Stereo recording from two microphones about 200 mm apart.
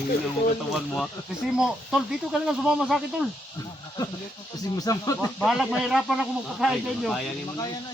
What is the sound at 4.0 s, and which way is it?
Speech, 20° left (ahead or behind).